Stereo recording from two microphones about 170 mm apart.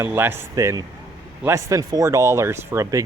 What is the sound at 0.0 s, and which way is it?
Speech, 10° right (ahead or behind).